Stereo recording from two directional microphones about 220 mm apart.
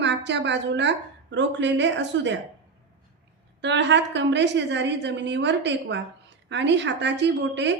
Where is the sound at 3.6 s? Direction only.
55° right (ahead or behind).